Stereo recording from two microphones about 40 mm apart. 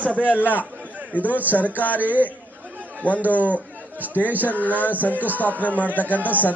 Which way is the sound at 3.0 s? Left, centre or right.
Left.